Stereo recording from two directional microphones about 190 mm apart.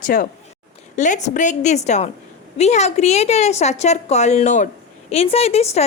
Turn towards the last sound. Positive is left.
turn(degrees=35)  # may be behind; listen again after turning